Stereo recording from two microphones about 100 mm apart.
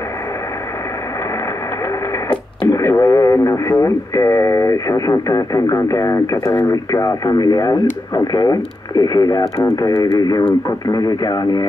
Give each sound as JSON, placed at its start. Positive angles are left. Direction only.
{"t": 2.2, "sound": "radio", "side_deg": 35}
{"t": 3.4, "sound": "speech", "side_deg": 30}